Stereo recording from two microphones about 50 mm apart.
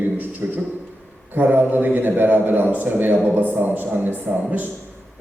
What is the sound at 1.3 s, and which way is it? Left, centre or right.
A man's voice, right.